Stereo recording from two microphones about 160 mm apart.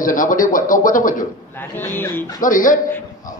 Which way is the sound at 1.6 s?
15° left (ahead or behind).